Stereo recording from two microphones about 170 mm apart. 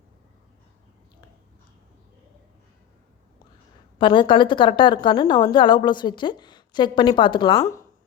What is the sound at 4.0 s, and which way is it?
A woman's voice, 30° left (ahead or behind).